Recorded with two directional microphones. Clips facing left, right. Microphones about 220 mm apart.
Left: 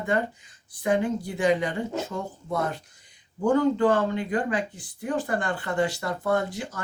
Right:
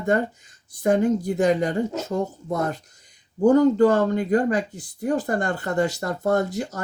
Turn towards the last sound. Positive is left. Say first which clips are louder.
# right 4 dB
turn(degrees=-40)  # may be behind; listen again after turning